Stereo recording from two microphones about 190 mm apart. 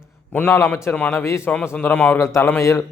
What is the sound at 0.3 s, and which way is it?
A man's voice, 10° left (ahead or behind).